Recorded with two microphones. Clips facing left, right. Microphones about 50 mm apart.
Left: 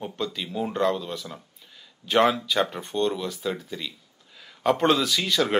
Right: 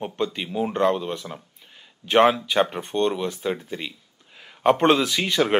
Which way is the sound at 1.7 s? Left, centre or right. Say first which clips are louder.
Right 3 dB; right.